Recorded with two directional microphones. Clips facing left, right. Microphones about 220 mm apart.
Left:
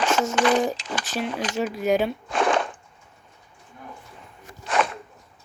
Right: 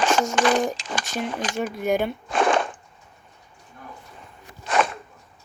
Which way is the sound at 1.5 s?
Centre (ahead or behind).